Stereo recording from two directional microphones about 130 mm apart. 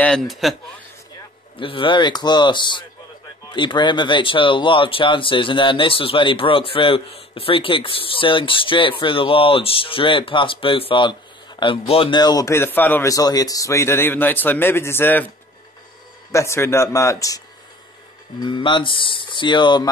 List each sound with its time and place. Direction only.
0.0 s speech: 5° left (ahead or behind)
1.6 s a man's voice: 40° left (ahead or behind); by 13.1 s 15° left (ahead or behind)
13.1 s a man's voice: 30° left (ahead or behind)
16.3 s a man's voice: 20° left (ahead or behind)
18.4 s speech: 40° left (ahead or behind)